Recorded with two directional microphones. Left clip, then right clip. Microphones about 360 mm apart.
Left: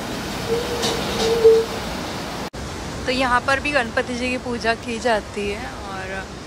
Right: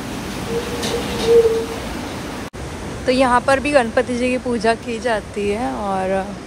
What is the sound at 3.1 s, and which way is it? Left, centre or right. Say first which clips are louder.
Speech: right 4 dB; centre.